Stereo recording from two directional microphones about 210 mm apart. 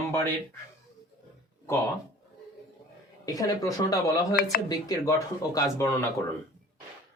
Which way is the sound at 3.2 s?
15° left (ahead or behind).